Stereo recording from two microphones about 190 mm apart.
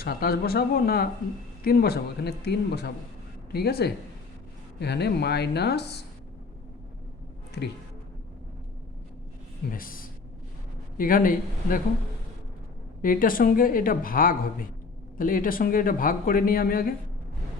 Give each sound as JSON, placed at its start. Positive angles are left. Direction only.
{"t": 0.0, "sound": "speech", "side_deg": 55}
{"t": 7.6, "sound": "speech", "side_deg": 60}
{"t": 9.6, "sound": "speech", "side_deg": 50}
{"t": 13.0, "sound": "speech", "side_deg": 50}